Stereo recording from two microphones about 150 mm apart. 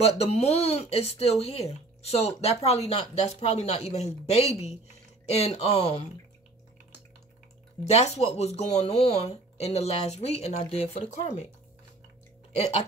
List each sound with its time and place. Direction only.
0.2 s speech: 45° left (ahead or behind)
7.8 s speech: 45° left (ahead or behind)
12.5 s speech: 45° left (ahead or behind)